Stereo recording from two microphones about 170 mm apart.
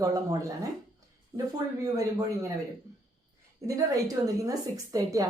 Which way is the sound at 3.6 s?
20° right (ahead or behind).